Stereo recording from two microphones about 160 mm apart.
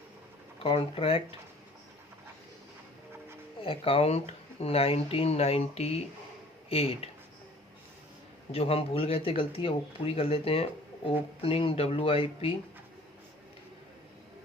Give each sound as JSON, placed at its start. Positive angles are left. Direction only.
{"t": 0.6, "sound": "speech", "side_deg": 35}
{"t": 3.6, "sound": "speech", "side_deg": 35}
{"t": 8.5, "sound": "speech", "side_deg": 40}